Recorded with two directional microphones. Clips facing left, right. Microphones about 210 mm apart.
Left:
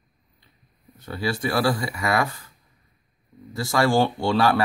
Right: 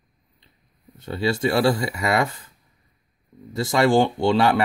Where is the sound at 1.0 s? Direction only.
25° right (ahead or behind).